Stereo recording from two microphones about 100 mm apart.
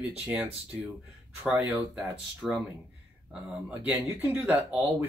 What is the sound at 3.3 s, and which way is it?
Speech, 10° right (ahead or behind).